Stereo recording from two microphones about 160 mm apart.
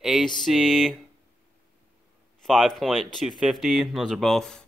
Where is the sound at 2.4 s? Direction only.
Centre (ahead or behind).